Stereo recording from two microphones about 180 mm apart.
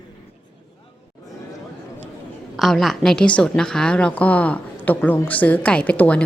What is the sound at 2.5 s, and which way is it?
A woman's voice, centre (ahead or behind).